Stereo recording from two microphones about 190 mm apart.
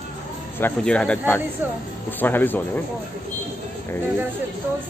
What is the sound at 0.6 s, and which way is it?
Speech, 5° left (ahead or behind).